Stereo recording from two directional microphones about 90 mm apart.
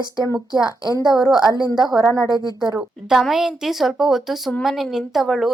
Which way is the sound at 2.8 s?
5° right (ahead or behind).